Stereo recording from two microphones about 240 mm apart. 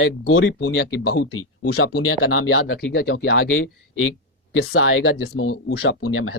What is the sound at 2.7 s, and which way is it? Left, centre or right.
Speech, left.